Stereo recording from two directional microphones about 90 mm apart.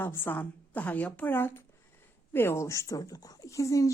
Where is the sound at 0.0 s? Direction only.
25° left (ahead or behind).